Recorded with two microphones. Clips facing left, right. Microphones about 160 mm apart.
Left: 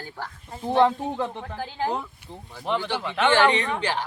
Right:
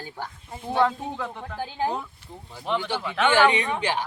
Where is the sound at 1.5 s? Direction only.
15° right (ahead or behind).